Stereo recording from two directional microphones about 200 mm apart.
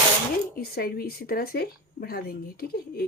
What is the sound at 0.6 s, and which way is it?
Speech, 50° left (ahead or behind).